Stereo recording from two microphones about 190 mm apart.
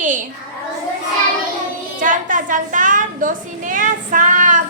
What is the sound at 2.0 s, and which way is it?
A woman's voice, 45° right (ahead or behind).